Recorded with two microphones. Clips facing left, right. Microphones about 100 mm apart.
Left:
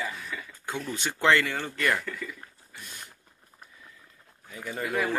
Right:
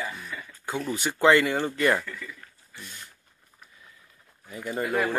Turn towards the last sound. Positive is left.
turn(degrees=-10)  # may be behind; listen again after turning